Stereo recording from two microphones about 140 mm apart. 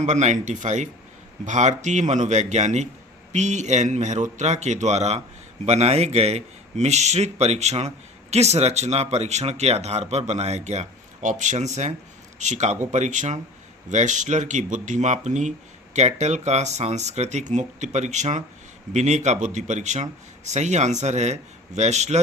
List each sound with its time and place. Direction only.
0.0 s speech: 55° right (ahead or behind)